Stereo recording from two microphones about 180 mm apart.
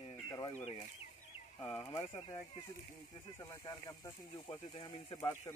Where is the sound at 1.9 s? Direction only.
25° left (ahead or behind).